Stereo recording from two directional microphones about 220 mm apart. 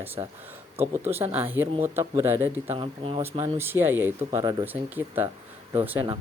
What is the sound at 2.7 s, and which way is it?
Speech, 25° right (ahead or behind).